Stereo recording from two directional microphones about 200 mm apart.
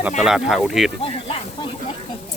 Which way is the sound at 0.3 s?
Centre (ahead or behind).